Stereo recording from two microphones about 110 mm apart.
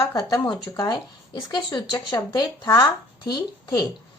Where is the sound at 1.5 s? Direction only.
40° left (ahead or behind).